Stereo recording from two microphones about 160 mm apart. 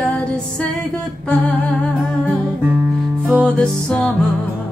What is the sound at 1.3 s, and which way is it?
Humming, 10° left (ahead or behind).